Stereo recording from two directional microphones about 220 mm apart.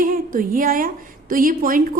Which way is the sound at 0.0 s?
40° right (ahead or behind).